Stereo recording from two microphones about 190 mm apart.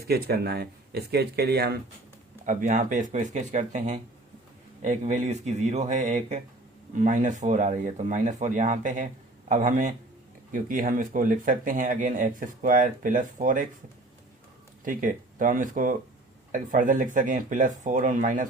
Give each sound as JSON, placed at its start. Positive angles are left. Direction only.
{"t": 0.1, "sound": "speech", "side_deg": -55}
{"t": 2.5, "sound": "speech", "side_deg": -45}
{"t": 14.8, "sound": "speech", "side_deg": -45}